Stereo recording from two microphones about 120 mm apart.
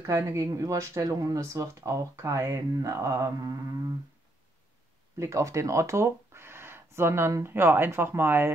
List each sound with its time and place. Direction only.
0.0 s speech: 25° right (ahead or behind)
5.1 s speech: 25° right (ahead or behind)